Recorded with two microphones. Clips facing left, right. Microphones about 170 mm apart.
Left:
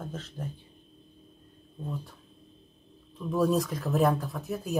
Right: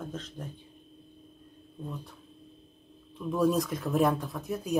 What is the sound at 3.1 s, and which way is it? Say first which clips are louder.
Speech: even; centre (ahead or behind).